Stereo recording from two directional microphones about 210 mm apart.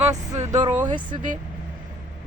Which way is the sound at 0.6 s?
35° right (ahead or behind).